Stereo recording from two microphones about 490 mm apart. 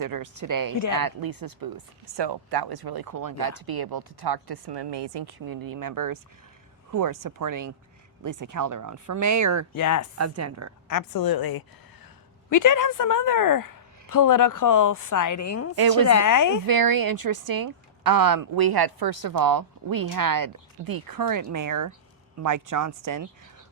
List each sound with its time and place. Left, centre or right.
0.0 s speech: right
9.7 s a woman's voice: left
10.2 s speech: right
10.8 s a woman's voice: left
15.7 s speech: right
16.0 s a woman's voice: left
16.6 s speech: right